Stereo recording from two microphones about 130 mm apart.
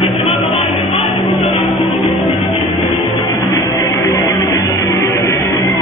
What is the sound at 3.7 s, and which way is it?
Music, 20° left (ahead or behind).